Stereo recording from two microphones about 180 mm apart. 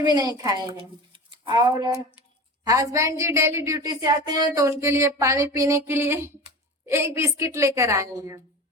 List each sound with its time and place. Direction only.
0.0 s a woman's voice: 20° right (ahead or behind)